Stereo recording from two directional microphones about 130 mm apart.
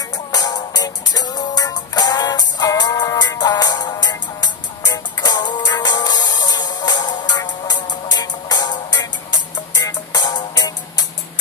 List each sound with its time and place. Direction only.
0.3 s music: 30° left (ahead or behind)